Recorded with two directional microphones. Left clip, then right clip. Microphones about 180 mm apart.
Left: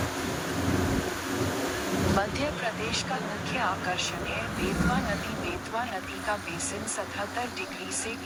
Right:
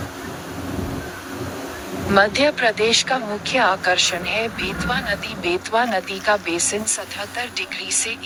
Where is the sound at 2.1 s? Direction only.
55° right (ahead or behind).